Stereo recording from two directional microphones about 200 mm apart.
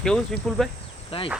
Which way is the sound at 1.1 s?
25° left (ahead or behind).